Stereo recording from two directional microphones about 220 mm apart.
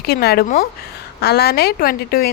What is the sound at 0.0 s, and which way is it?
Speech, 45° left (ahead or behind).